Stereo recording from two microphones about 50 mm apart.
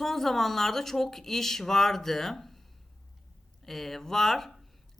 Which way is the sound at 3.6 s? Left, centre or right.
Centre.